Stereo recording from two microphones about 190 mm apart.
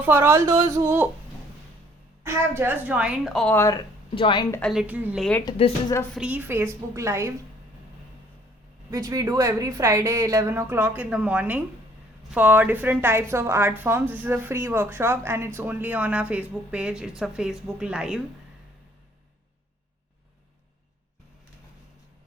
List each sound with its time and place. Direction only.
0.0 s a woman's voice: 10° right (ahead or behind)
2.2 s a woman's voice: 10° right (ahead or behind); by 3.8 s 10° left (ahead or behind)
4.1 s a woman's voice: 25° left (ahead or behind)
4.7 s a woman's voice: 5° right (ahead or behind)
5.5 s speech: 30° left (ahead or behind)
6.1 s a woman's voice: 5° right (ahead or behind)
8.9 s a woman's voice: 20° right (ahead or behind)